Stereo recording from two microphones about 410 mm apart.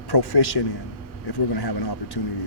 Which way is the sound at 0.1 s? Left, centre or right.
Left.